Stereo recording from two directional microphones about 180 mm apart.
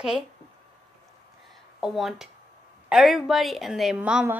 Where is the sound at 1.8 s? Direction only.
Centre (ahead or behind).